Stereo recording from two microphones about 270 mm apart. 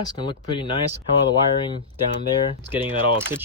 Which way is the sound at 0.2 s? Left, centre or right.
Centre.